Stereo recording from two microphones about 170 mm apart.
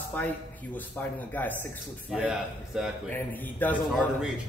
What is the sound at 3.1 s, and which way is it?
Speech, 10° left (ahead or behind).